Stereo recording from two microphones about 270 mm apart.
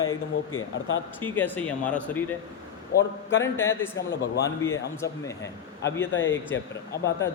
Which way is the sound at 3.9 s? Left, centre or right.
Left.